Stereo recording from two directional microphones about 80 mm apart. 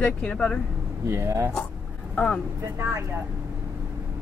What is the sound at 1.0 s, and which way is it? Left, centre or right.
Speech, right.